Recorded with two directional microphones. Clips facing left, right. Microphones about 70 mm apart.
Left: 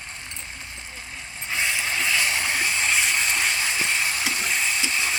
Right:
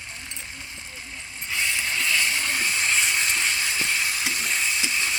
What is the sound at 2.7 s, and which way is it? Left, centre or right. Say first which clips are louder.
Water: even; centre.